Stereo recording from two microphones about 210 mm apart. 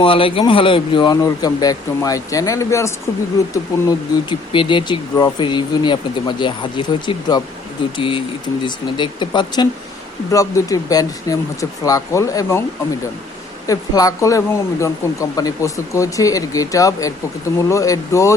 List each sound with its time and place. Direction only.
0.0 s speech: 25° left (ahead or behind)
13.7 s speech: 15° left (ahead or behind)